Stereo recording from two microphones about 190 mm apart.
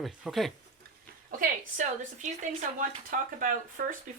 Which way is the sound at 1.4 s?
40° right (ahead or behind).